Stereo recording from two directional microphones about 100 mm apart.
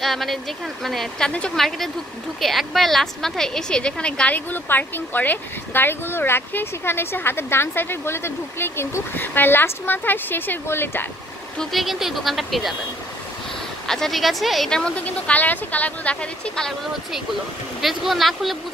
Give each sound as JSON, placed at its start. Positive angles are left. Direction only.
{"t": 0.0, "sound": "a woman's voice", "side_deg": 0}
{"t": 11.5, "sound": "speech", "side_deg": 5}
{"t": 13.8, "sound": "speech", "side_deg": 5}